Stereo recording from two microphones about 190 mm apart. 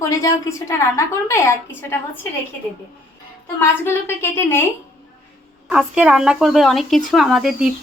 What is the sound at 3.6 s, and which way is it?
A woman's voice, 10° left (ahead or behind).